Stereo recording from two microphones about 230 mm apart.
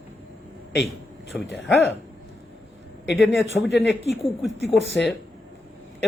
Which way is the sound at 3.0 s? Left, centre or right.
Left.